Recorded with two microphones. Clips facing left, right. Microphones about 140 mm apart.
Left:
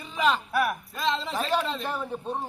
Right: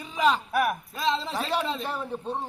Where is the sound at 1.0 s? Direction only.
Centre (ahead or behind).